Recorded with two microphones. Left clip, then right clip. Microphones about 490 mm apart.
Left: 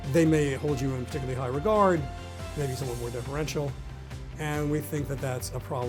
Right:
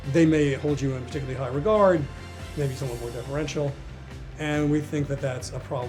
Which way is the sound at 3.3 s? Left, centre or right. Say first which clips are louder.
Right 5 dB; left.